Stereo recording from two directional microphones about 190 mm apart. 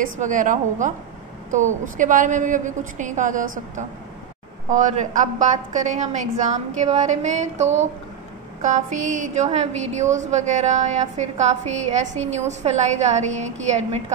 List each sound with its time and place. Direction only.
0.0 s a woman's voice: 45° right (ahead or behind)